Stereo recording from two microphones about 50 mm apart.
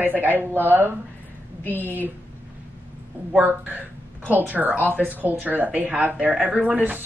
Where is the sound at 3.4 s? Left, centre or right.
Right.